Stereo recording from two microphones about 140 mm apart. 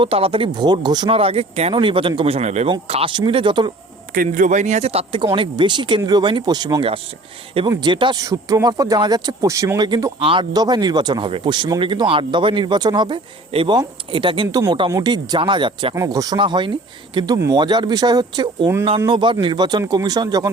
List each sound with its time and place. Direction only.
0.0 s speech: 40° right (ahead or behind)
1.1 s speech: 45° right (ahead or behind)
2.6 s speech: 40° right (ahead or behind)
4.1 s speech: 80° right; by 8.2 s 35° right (ahead or behind)
8.2 s speech: 25° right (ahead or behind)
16.0 s speech: 25° right (ahead or behind)